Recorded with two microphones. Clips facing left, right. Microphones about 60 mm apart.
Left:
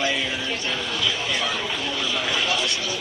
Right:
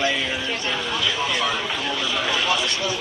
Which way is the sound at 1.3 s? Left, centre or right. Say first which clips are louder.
Right 2 dB; centre.